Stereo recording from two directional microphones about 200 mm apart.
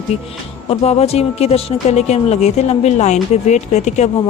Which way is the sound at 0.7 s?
30° left (ahead or behind).